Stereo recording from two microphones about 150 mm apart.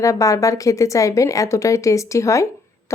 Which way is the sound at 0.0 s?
20° left (ahead or behind).